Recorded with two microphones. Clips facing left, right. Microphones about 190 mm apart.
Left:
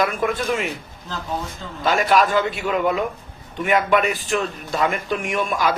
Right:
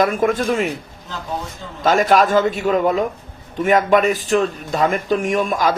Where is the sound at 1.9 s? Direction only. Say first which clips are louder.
Right 3 dB; 40° right (ahead or behind).